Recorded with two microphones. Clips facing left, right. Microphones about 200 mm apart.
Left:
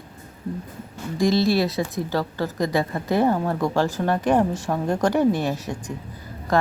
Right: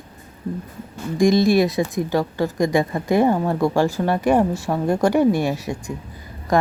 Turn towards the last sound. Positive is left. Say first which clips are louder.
# right 2 dB
turn(degrees=-15)  # may be behind; listen again after turning